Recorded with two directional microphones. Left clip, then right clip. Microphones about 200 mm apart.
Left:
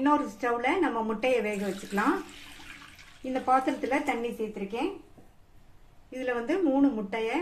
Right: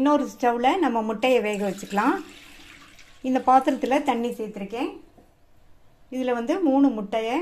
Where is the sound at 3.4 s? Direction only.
45° right (ahead or behind).